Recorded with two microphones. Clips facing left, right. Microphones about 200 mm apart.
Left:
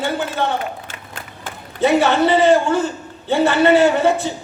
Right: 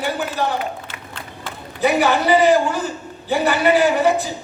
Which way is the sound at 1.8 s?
25° left (ahead or behind).